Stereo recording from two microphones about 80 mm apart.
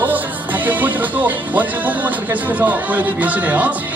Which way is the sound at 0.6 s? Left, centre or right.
Right.